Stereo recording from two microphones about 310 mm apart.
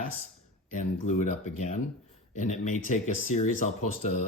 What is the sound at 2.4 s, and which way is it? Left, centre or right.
Speech, left.